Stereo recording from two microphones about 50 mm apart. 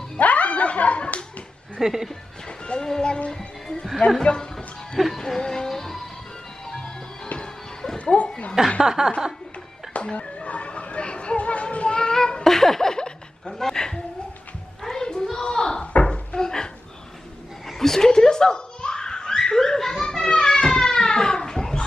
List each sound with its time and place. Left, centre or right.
0.2 s slap: left
1.8 s speech: centre
2.6 s speech: centre
4.9 s music: centre
5.2 s music: centre
8.0 s a sound: left
8.8 s speech: centre
9.9 s music: left
12.4 s a sound: centre
17.6 s giggle: centre